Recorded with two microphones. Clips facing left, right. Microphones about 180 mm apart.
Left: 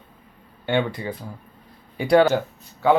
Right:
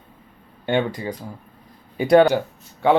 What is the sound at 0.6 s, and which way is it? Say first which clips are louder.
Speech: right 1 dB; 20° right (ahead or behind).